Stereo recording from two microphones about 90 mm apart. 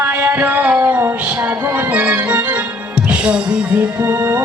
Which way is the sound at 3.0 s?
10° right (ahead or behind).